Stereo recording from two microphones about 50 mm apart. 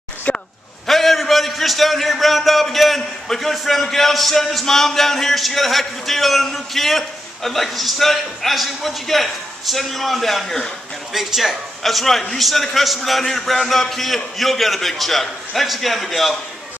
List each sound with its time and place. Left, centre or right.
0.3 s a sound: left
0.8 s a man's voice: centre
11.1 s a man's voice: centre